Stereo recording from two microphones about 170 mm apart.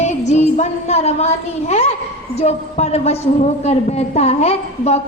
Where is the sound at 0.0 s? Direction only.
45° left (ahead or behind).